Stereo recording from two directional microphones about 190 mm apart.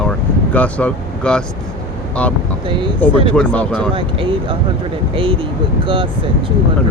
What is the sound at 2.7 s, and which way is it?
Speech, 25° right (ahead or behind).